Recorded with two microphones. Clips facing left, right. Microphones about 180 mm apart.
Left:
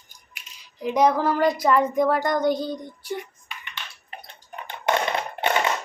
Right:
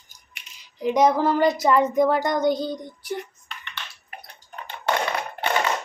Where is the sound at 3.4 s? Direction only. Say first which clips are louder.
Even; 10° left (ahead or behind).